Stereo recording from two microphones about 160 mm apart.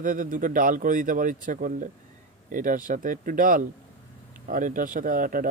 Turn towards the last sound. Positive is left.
turn(degrees=-60)  # may be behind; listen again after turning